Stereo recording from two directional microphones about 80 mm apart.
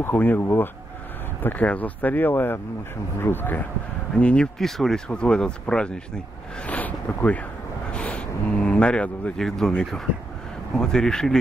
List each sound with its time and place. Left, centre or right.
0.0 s speech: left
4.1 s speech: centre
10.8 s speech: centre